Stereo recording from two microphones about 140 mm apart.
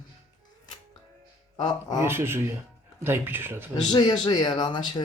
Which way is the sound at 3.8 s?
30° left (ahead or behind).